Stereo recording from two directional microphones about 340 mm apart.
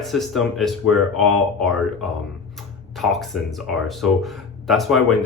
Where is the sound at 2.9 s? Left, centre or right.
Centre.